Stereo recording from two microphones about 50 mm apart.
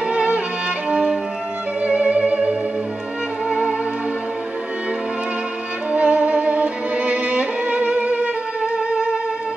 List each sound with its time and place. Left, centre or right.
0.1 s music: right
5.9 s music: right